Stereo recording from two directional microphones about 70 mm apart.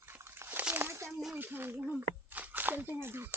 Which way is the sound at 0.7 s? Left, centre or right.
Right.